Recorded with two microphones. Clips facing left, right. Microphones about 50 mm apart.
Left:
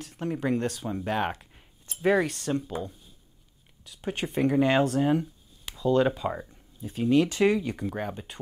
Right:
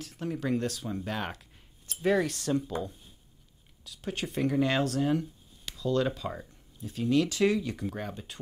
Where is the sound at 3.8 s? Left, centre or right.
Centre.